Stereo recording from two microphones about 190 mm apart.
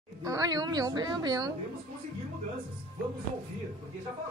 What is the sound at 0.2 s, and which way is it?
A woman's voice, 20° right (ahead or behind).